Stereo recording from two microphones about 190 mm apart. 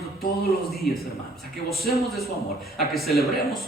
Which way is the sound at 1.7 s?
Centre (ahead or behind).